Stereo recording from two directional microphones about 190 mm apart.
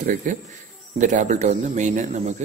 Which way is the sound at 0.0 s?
45° right (ahead or behind).